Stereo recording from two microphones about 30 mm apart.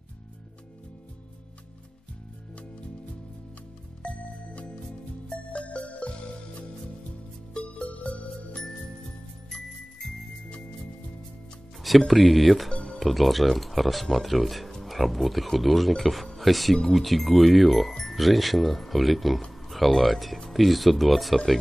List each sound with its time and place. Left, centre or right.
4.0 s music: left
5.5 s music: left
7.5 s music: left
11.8 s speech: centre